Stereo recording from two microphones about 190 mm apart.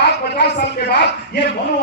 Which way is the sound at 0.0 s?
60° left (ahead or behind).